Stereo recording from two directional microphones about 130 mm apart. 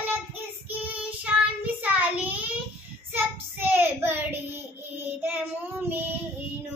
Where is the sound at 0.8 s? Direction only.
10° right (ahead or behind).